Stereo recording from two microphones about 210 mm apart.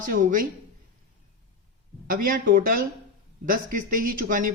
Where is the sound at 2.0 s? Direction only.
45° right (ahead or behind).